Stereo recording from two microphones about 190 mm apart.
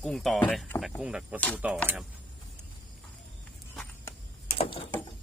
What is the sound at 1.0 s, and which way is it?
Speech, 5° right (ahead or behind).